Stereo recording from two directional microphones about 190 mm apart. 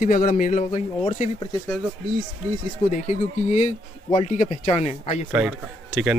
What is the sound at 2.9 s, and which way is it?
Speech, 40° left (ahead or behind).